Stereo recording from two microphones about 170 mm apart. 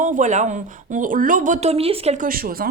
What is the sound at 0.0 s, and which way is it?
Speech, 50° right (ahead or behind).